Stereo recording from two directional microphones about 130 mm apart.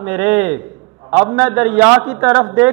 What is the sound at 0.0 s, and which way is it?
Speech, 15° right (ahead or behind).